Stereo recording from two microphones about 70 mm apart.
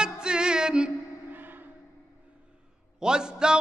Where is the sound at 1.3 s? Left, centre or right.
Right.